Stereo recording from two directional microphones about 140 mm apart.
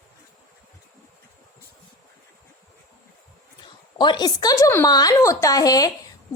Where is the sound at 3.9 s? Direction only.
30° left (ahead or behind).